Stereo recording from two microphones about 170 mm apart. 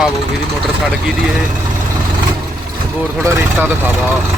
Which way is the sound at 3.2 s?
15° right (ahead or behind).